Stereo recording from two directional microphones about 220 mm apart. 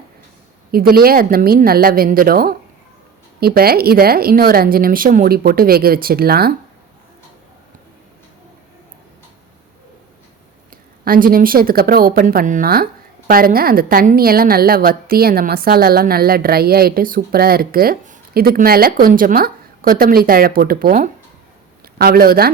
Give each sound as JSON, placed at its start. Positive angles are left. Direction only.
{"t": 0.7, "sound": "speech", "side_deg": -45}
{"t": 11.0, "sound": "speech", "side_deg": -40}